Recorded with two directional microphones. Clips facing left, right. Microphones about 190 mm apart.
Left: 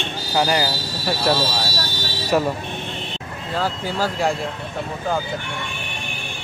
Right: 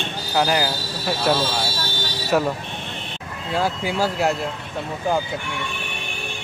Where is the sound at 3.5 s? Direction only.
10° right (ahead or behind).